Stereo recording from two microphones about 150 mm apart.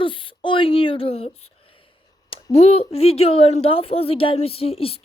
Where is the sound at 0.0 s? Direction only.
35° left (ahead or behind).